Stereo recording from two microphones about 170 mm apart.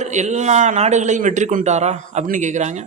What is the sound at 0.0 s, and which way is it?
A man's voice, 45° right (ahead or behind).